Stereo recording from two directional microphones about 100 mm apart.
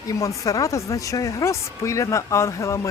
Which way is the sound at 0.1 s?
35° left (ahead or behind).